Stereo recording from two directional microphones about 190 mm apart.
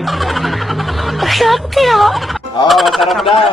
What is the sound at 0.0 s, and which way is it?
Music, centre (ahead or behind).